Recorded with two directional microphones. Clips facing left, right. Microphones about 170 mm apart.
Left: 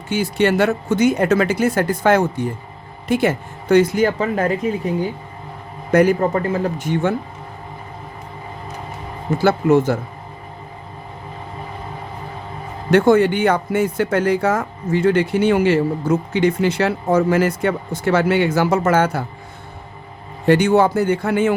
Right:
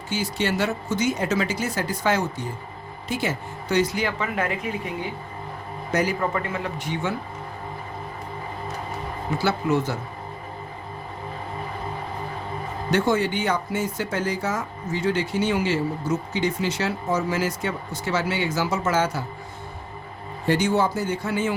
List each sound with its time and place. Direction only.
0.1 s speech: 60° left (ahead or behind); by 5.0 s 35° left (ahead or behind)
5.9 s speech: 55° left (ahead or behind)
6.1 s speech: 35° left (ahead or behind)
9.4 s speech: 50° left (ahead or behind)
12.9 s speech: 55° left (ahead or behind)
20.5 s speech: 65° left (ahead or behind)